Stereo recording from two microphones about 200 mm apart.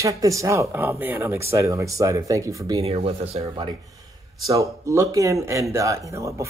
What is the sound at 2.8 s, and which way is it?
Speech, 30° right (ahead or behind).